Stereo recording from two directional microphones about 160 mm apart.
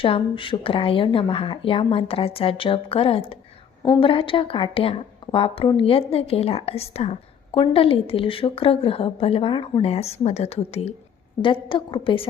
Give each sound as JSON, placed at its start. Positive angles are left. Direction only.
{"t": 0.0, "sound": "a woman's voice", "side_deg": 35}